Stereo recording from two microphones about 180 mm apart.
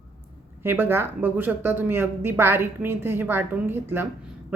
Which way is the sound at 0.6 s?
10° right (ahead or behind).